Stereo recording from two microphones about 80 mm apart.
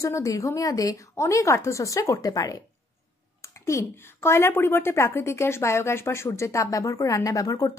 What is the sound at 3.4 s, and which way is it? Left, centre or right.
A woman's voice, left.